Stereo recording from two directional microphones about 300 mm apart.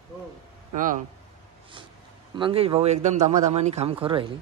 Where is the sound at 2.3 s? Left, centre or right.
Centre.